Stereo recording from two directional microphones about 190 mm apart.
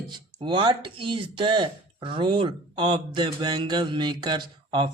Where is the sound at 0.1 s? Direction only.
25° right (ahead or behind).